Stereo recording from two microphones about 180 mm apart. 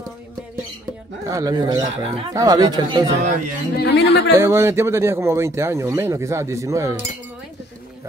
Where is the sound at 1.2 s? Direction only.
20° right (ahead or behind).